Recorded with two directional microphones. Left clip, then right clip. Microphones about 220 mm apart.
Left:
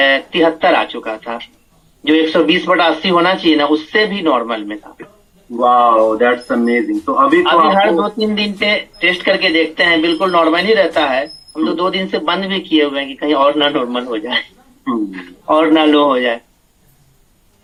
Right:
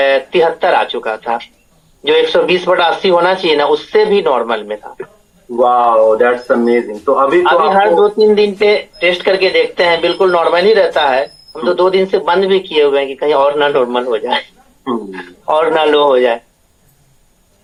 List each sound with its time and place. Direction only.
0.0 s speech: 50° right (ahead or behind)